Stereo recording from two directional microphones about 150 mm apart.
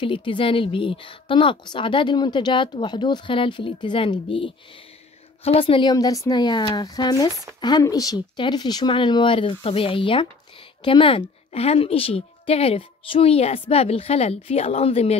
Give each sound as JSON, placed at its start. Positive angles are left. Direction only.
{"t": 0.0, "sound": "speech", "side_deg": 35}